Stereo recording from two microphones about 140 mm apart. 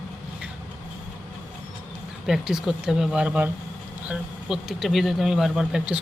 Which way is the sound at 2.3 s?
5° right (ahead or behind).